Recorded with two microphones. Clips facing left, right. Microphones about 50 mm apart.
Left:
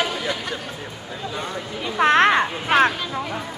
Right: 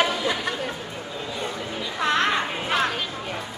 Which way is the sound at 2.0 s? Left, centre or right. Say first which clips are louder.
Left 7 dB; left.